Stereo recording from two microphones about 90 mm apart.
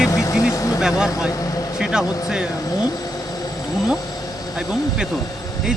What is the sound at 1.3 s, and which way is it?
Vehicle, 40° left (ahead or behind).